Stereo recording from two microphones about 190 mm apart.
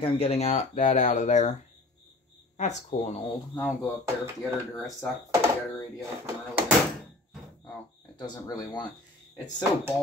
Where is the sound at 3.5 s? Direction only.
10° left (ahead or behind).